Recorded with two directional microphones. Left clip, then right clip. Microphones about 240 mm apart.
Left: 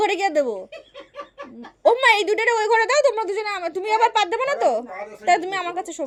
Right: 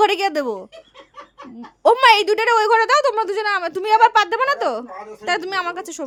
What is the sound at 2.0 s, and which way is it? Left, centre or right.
Speech, right.